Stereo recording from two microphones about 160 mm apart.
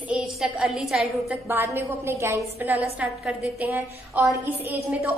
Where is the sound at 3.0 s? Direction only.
Centre (ahead or behind).